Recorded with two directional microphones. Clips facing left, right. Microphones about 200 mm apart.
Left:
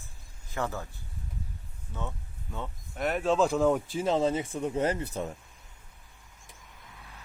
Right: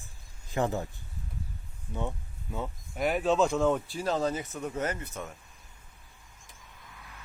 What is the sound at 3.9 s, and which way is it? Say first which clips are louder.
Speech: left 3 dB; 20° left (ahead or behind).